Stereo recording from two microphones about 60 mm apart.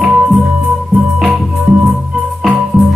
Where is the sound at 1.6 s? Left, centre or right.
Centre.